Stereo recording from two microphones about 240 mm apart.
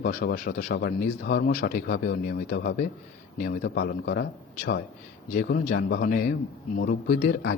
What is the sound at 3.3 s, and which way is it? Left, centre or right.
Speech, left.